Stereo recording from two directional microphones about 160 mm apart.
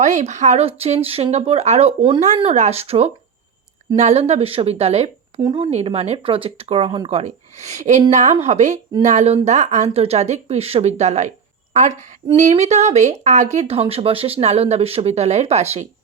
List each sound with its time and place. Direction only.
0.0 s speech: 50° right (ahead or behind)
5.4 s speech: 25° right (ahead or behind)
5.7 s speech: 40° right (ahead or behind)